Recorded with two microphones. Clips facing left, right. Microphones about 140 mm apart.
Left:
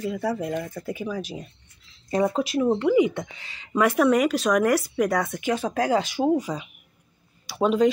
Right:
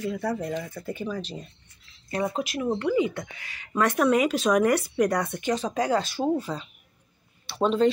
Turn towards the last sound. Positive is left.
turn(degrees=10)  # may be behind; listen again after turning